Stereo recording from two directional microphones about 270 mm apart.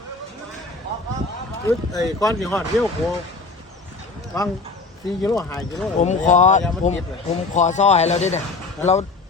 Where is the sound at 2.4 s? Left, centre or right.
Centre.